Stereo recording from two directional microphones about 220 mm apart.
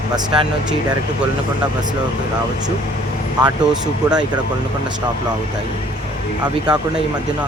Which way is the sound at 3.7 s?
5° right (ahead or behind).